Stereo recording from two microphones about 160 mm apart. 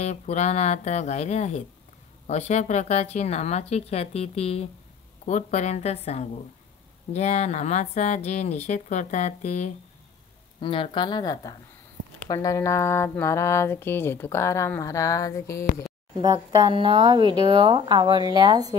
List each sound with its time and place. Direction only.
0.0 s speech: 45° left (ahead or behind)
10.6 s speech: 35° left (ahead or behind)
16.2 s speech: 25° right (ahead or behind)